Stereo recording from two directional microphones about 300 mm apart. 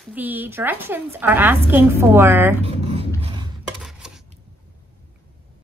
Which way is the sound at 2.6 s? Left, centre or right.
Centre.